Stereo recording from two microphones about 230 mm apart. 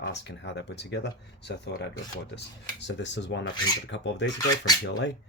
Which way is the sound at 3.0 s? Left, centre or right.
Left.